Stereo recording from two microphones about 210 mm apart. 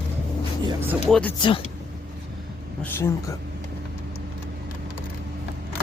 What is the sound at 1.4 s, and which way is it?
Speech, 25° left (ahead or behind).